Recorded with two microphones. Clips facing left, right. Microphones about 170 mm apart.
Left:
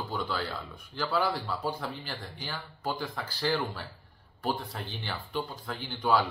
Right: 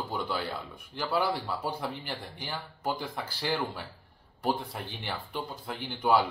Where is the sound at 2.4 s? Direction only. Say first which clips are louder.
Right 1 dB; 20° right (ahead or behind).